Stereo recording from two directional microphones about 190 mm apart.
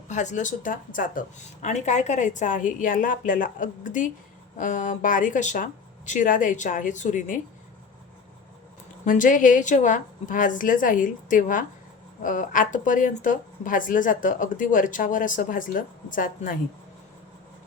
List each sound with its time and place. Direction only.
0.1 s speech: 40° left (ahead or behind)
9.0 s speech: 45° left (ahead or behind)